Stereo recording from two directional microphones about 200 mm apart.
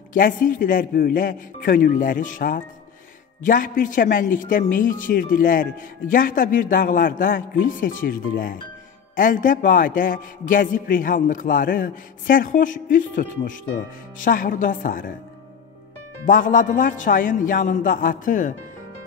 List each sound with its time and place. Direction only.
0.1 s speech: 45° left (ahead or behind)
16.3 s a man's voice: 40° left (ahead or behind)